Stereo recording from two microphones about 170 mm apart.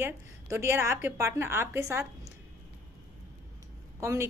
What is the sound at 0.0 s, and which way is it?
Speech, 15° right (ahead or behind).